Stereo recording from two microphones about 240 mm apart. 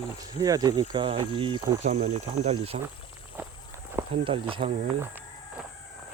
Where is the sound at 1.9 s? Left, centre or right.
Right.